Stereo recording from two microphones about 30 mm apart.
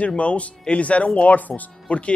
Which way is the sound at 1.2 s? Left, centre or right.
Left.